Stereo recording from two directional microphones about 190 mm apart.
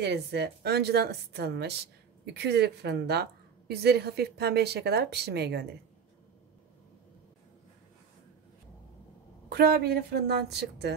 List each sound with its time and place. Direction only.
0.0 s a woman's voice: 60° right (ahead or behind)
9.5 s a woman's voice: 55° right (ahead or behind)